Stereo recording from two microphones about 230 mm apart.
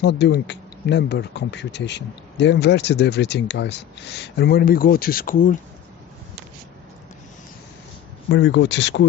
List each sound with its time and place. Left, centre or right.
0.0 s speech: left
8.3 s speech: left